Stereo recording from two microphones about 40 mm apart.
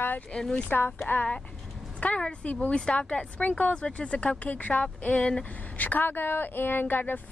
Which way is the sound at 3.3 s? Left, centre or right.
Left.